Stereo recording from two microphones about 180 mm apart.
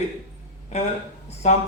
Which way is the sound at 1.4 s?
35° left (ahead or behind).